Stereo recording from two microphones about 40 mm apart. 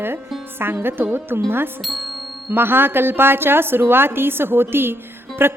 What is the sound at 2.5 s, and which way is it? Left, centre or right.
A woman's voice, right.